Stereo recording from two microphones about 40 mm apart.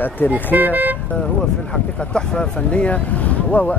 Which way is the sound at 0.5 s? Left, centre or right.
Right.